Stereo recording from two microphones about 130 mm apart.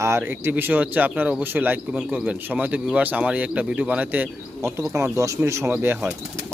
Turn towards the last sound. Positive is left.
turn(degrees=-15)  # may be behind; listen again after turning